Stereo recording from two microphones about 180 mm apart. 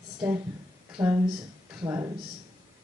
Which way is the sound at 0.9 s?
10° right (ahead or behind).